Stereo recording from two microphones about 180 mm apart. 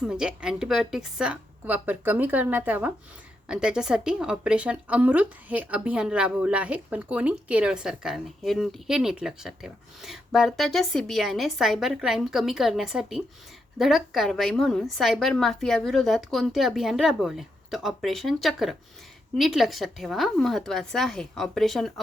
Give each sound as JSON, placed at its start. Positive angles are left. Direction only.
{"t": 0.0, "sound": "a woman's voice", "side_deg": -5}